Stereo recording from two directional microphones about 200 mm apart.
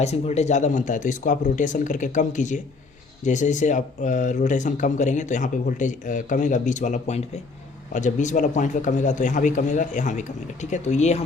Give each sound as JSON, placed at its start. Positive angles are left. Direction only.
{"t": 0.0, "sound": "speech", "side_deg": 35}